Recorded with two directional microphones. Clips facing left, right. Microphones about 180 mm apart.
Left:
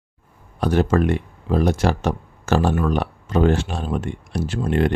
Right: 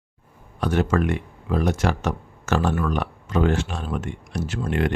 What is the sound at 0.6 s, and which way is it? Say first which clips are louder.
Speech: left 3 dB; 35° left (ahead or behind).